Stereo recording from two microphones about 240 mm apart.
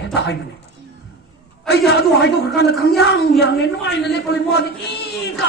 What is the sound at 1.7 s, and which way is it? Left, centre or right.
A man's voice, left.